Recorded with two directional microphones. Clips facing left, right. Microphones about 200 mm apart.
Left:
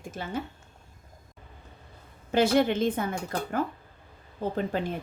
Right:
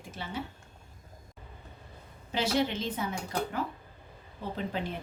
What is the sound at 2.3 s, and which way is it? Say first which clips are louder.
Speech: left 7 dB; 50° left (ahead or behind).